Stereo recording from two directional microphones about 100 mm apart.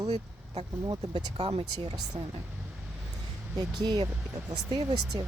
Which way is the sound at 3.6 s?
40° right (ahead or behind).